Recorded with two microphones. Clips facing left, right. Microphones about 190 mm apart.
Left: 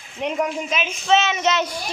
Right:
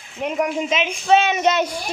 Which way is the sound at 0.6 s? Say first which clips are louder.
Right 4 dB; 20° right (ahead or behind).